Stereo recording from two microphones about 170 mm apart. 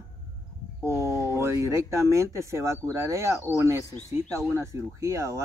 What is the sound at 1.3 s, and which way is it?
Speech, 15° right (ahead or behind).